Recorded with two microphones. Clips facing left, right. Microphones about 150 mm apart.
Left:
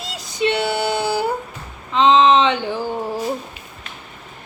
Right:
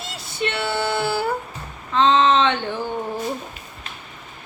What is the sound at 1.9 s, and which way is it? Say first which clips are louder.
Speech: left 3 dB; 15° left (ahead or behind).